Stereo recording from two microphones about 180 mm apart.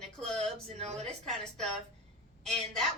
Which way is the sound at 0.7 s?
35° right (ahead or behind).